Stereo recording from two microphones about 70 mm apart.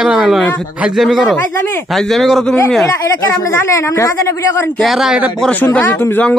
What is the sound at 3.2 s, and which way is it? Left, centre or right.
Speech, left.